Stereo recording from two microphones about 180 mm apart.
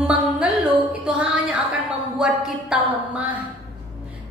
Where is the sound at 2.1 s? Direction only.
5° right (ahead or behind).